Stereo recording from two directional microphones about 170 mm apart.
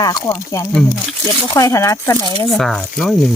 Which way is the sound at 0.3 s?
20° left (ahead or behind).